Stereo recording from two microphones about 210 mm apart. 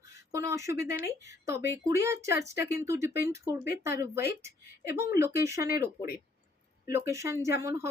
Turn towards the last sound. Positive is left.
turn(degrees=-15)  # may be behind; listen again after turning